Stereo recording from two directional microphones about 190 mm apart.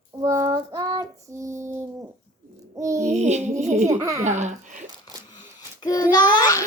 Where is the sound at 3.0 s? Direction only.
35° right (ahead or behind).